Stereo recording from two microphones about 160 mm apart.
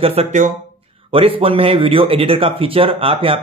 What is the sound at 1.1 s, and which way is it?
Speech, 35° right (ahead or behind).